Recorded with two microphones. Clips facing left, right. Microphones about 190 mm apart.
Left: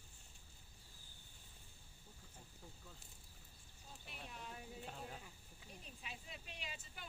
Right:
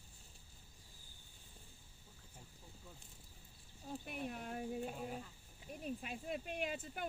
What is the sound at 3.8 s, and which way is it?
Speech, 55° right (ahead or behind).